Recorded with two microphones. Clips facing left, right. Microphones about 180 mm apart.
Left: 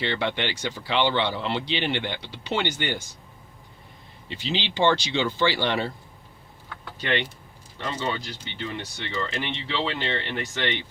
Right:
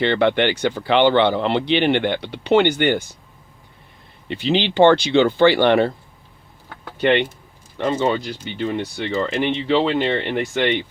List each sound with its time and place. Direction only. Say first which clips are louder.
0.0 s speech: right 10 dB; 60° right (ahead or behind)
4.3 s speech: right 10 dB; 60° right (ahead or behind)
7.0 s speech: right 10 dB; 60° right (ahead or behind)